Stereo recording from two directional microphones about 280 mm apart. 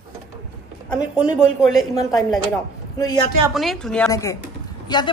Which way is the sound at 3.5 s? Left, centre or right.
Centre.